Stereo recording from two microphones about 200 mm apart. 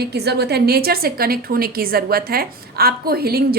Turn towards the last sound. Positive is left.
turn(degrees=-50)  # may be behind; listen again after turning